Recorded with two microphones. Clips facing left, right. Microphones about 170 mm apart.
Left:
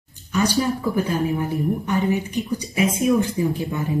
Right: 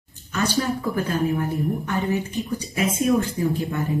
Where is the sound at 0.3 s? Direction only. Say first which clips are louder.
Left 3 dB; 15° left (ahead or behind).